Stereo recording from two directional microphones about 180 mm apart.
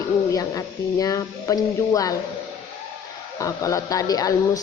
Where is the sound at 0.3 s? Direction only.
20° left (ahead or behind).